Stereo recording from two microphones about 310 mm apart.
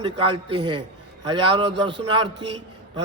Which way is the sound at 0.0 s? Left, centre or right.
Centre.